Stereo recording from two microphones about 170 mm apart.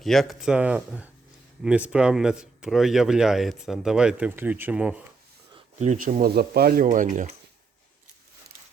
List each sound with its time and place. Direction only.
0.0 s speech: centre (ahead or behind)
5.8 s speech: 45° right (ahead or behind)